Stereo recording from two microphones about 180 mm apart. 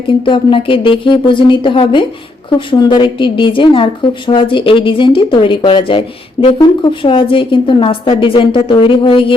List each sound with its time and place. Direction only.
0.3 s a woman's voice: 30° left (ahead or behind)